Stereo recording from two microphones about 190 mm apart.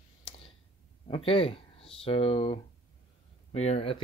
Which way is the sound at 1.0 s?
25° left (ahead or behind).